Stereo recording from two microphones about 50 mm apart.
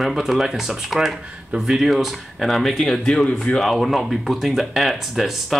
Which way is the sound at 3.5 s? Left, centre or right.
Centre.